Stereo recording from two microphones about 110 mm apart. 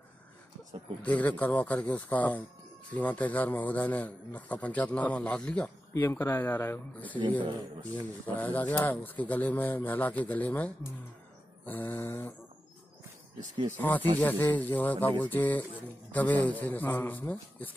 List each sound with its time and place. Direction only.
1.0 s a man's voice: 15° left (ahead or behind)
5.9 s speech: 20° left (ahead or behind)
7.2 s speech: 45° right (ahead or behind)
8.3 s a man's voice: 15° left (ahead or behind)
13.7 s a man's voice: 15° left (ahead or behind)